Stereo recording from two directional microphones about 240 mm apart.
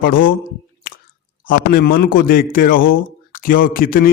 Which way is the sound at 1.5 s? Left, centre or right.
Left.